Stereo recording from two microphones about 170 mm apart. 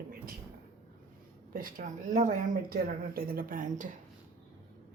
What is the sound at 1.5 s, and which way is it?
Speech, 55° right (ahead or behind).